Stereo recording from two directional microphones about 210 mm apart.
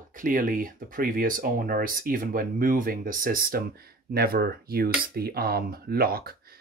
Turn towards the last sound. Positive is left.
turn(degrees=-45)  # may be behind; listen again after turning